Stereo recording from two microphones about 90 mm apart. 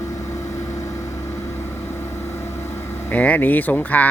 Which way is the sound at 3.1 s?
15° left (ahead or behind).